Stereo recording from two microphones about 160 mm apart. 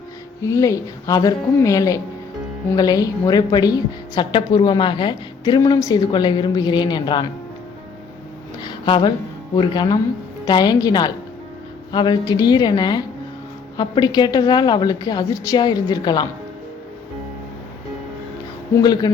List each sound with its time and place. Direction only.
0.4 s a woman's voice: 20° left (ahead or behind)
8.6 s a sound: 30° left (ahead or behind)
9.6 s a woman's voice: 25° left (ahead or behind)
18.8 s a woman's voice: 25° left (ahead or behind)